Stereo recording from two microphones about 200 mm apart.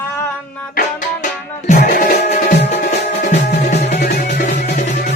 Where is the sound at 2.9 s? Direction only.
35° left (ahead or behind).